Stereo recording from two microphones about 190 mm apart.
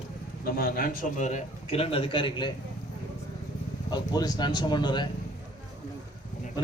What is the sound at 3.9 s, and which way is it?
A man's voice, 20° left (ahead or behind).